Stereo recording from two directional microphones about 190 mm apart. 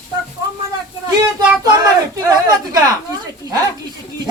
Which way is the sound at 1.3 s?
20° right (ahead or behind).